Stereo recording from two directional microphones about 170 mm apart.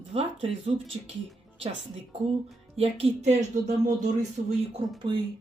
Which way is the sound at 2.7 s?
35° right (ahead or behind).